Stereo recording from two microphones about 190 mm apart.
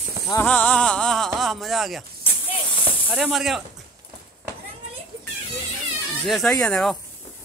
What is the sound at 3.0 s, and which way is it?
Speech, 5° right (ahead or behind).